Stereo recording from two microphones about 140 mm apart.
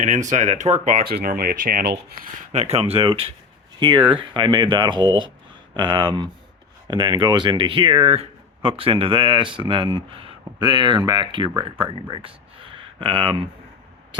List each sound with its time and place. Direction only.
0.0 s speech: 60° right (ahead or behind); by 2.1 s 90° right
2.5 s speech: 50° right (ahead or behind)